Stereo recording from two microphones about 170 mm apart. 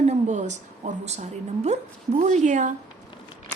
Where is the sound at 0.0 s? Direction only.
45° right (ahead or behind).